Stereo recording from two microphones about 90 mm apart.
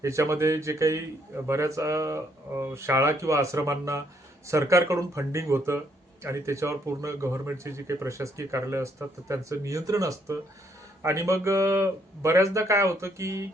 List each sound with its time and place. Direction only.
0.0 s speech: 35° right (ahead or behind)